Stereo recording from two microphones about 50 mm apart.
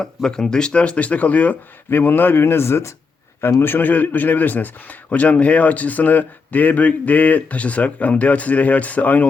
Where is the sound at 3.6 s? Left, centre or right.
Left.